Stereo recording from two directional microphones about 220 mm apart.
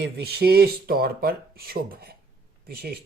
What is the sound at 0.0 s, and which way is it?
Speech, 45° right (ahead or behind).